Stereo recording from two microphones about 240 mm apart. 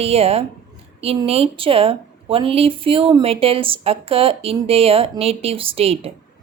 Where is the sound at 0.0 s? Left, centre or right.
Right.